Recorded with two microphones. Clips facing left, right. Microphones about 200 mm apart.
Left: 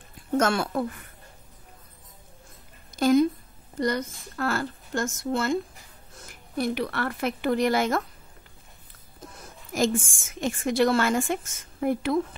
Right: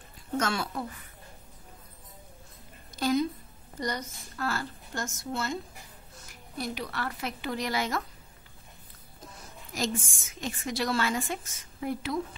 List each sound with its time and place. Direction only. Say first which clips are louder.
0.4 s a woman's voice: left 7 dB; 55° left (ahead or behind)
3.0 s a woman's voice: left 7 dB; 50° left (ahead or behind)
9.7 s a woman's voice: left 7 dB; 50° left (ahead or behind)